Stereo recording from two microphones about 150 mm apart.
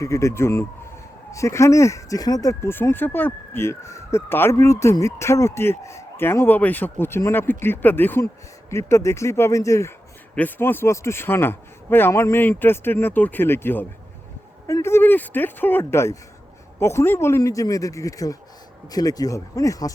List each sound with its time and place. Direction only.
0.0 s a man's voice: 20° left (ahead or behind)